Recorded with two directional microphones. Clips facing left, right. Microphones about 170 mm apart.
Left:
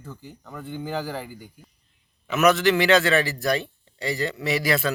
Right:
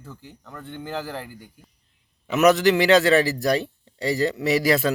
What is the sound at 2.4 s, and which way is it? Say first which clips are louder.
Speech: right 2 dB; 35° right (ahead or behind).